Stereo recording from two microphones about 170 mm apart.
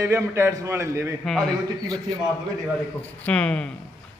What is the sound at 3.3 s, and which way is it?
Speech, 10° left (ahead or behind).